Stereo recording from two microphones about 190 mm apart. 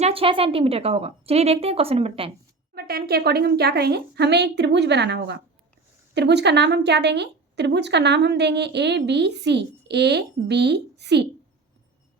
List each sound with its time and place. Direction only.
0.0 s a woman's voice: 30° right (ahead or behind)
2.7 s a woman's voice: 55° right (ahead or behind)